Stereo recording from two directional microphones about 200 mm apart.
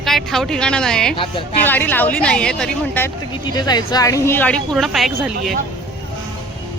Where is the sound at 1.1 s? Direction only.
25° left (ahead or behind).